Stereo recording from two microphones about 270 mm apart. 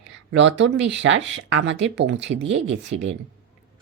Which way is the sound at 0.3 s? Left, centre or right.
Right.